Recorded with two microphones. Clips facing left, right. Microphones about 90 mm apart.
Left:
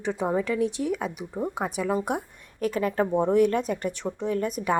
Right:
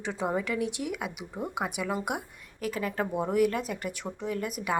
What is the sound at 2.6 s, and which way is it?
A woman's voice, 40° left (ahead or behind).